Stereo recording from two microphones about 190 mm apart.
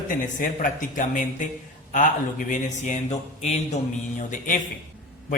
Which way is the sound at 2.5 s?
40° left (ahead or behind).